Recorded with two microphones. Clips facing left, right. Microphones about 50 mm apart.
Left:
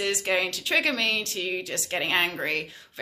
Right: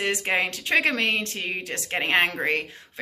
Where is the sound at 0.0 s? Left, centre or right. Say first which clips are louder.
Right 1 dB; right.